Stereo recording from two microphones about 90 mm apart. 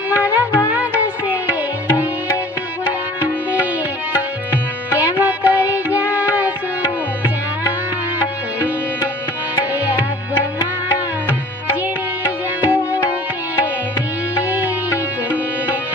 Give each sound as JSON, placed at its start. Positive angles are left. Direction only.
{"t": 0.1, "sound": "music", "side_deg": -20}
{"t": 2.8, "sound": "music", "side_deg": -15}
{"t": 4.9, "sound": "music", "side_deg": -20}
{"t": 9.6, "sound": "tabla", "side_deg": -20}
{"t": 10.8, "sound": "music", "side_deg": -15}
{"t": 14.3, "sound": "music", "side_deg": -15}